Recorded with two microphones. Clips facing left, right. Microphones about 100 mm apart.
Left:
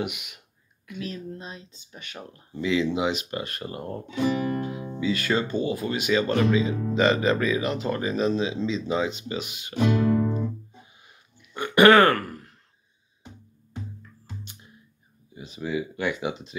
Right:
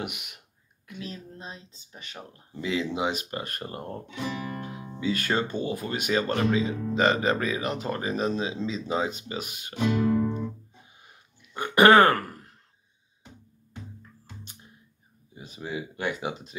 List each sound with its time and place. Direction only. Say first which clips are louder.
0.9 s speech: left 5 dB; 25° right (ahead or behind)
2.6 s speech: left 4 dB; 40° right (ahead or behind)
4.1 s music: left 10 dB; 5° left (ahead or behind)
5.0 s speech: left 2 dB; 45° right (ahead or behind)
9.8 s music: left 2 dB; centre (ahead or behind)
11.5 s a man's voice: left 1 dB; 30° right (ahead or behind)
15.3 s speech: left 5 dB; 45° right (ahead or behind)